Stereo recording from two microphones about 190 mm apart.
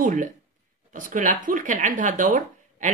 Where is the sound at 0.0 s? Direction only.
45° right (ahead or behind).